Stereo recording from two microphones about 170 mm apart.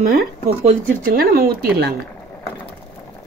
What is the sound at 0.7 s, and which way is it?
Speech, 60° right (ahead or behind).